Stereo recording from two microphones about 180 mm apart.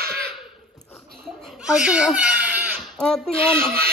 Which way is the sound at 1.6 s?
5° right (ahead or behind).